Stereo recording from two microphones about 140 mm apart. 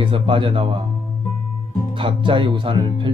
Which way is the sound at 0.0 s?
35° right (ahead or behind).